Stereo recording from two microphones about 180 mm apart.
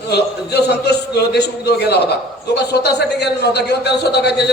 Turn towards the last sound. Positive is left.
turn(degrees=65)  # may be behind; listen again after turning